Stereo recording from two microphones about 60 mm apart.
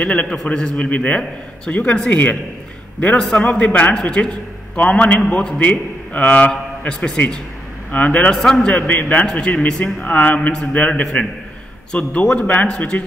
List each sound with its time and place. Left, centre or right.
0.0 s a man's voice: centre
2.0 s a man's voice: left
3.2 s a man's voice: centre
3.4 s a man's voice: left
6.9 s a man's voice: centre
7.9 s a man's voice: left
8.4 s a man's voice: centre
8.6 s a man's voice: left